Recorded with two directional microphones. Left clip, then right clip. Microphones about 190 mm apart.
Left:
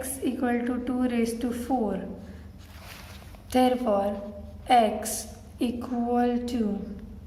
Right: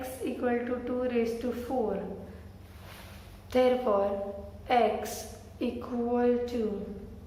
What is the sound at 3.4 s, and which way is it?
A woman's voice, 45° left (ahead or behind).